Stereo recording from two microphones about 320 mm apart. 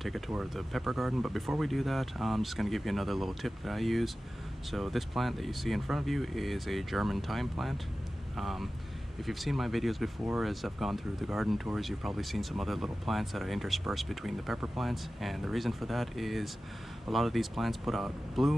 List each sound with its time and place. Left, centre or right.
0.0 s speech: centre